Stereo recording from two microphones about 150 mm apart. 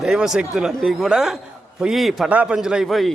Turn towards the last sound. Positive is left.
turn(degrees=0)  # may be behind; listen again after turning